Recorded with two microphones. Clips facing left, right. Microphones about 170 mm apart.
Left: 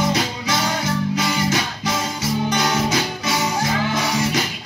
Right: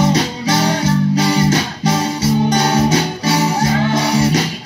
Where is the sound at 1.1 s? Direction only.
30° right (ahead or behind).